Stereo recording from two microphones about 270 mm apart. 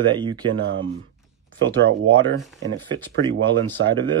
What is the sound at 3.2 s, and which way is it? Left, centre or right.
Speech, right.